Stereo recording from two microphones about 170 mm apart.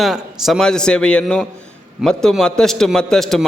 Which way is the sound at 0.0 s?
Centre (ahead or behind).